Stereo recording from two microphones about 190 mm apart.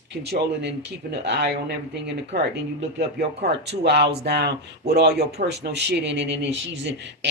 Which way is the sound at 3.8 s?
60° right (ahead or behind).